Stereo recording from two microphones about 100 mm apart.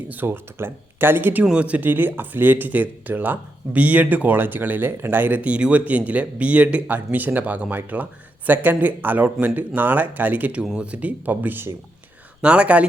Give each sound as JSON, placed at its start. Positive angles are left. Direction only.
{"t": 0.1, "sound": "speech", "side_deg": -20}